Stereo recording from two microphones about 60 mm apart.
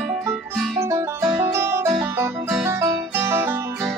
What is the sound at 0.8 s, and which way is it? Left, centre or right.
Music, right.